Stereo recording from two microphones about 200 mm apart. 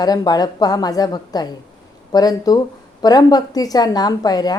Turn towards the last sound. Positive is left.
turn(degrees=20)  # may be behind; listen again after turning